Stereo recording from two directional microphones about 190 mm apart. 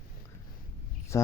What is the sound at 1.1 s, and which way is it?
Speech, 15° left (ahead or behind).